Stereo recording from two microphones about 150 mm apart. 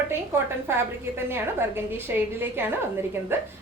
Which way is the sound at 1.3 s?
15° right (ahead or behind).